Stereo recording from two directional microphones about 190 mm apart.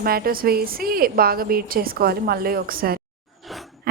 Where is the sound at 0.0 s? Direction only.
50° right (ahead or behind).